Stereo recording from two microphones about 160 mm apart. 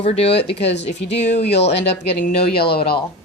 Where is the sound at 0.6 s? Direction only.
90° left.